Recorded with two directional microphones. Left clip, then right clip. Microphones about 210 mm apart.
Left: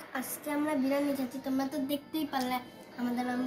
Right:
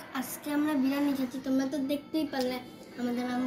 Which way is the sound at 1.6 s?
40° left (ahead or behind).